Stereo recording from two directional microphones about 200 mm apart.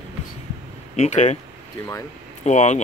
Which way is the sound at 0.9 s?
35° left (ahead or behind).